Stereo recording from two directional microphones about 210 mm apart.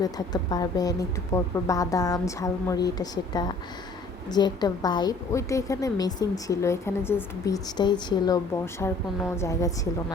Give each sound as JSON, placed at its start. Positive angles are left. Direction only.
{"t": 0.5, "sound": "a woman's voice", "side_deg": 15}